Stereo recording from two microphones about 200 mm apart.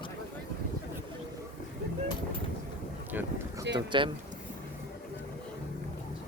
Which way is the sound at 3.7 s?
25° right (ahead or behind).